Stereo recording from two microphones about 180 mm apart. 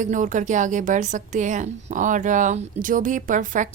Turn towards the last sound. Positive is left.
turn(degrees=-45)  # may be behind; listen again after turning